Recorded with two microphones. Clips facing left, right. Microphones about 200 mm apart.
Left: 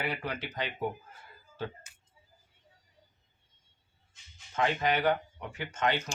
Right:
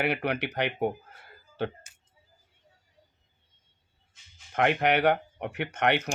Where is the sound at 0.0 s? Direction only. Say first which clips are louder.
Right 7 dB; 65° right (ahead or behind).